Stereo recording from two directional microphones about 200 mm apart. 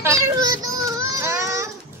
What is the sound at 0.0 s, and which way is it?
Child singing, 15° right (ahead or behind).